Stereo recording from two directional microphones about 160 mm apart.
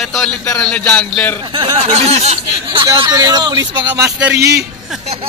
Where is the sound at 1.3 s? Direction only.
30° right (ahead or behind).